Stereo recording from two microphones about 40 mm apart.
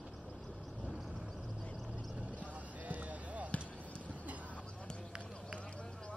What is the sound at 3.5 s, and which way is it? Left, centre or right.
Basketball bounce, left.